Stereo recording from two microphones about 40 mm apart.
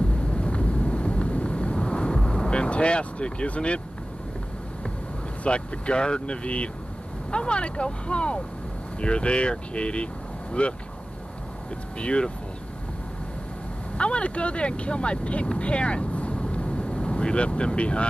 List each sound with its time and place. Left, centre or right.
0.1 s vehicle: left
5.4 s speech: left
12.0 s speech: left
13.9 s speech: left